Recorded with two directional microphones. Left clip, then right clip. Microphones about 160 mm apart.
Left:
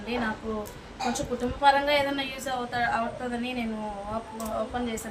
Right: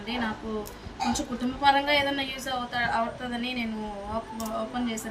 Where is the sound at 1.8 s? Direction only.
25° left (ahead or behind).